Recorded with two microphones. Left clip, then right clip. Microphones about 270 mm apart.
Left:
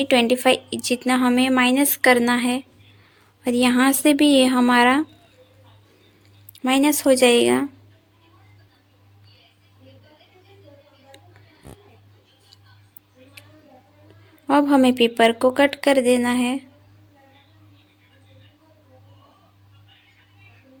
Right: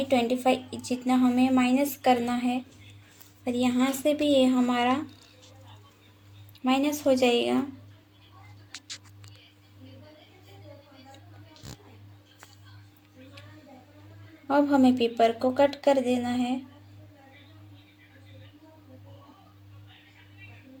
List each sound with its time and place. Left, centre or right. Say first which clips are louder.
0.0 s a woman's voice: left 7 dB; left
6.6 s a woman's voice: left 7 dB; left
14.4 s a woman's voice: left 6 dB; left